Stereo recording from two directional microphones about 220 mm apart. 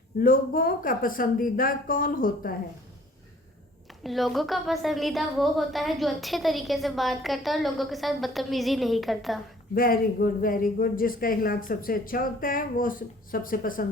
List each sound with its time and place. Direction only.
0.2 s speech: 40° left (ahead or behind)
4.0 s a woman's voice: centre (ahead or behind)
9.7 s speech: 40° left (ahead or behind)